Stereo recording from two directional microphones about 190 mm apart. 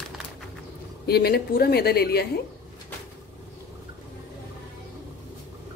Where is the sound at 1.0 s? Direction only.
55° left (ahead or behind).